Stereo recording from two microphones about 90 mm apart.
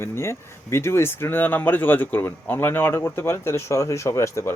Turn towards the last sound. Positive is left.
turn(degrees=35)  # may be behind; listen again after turning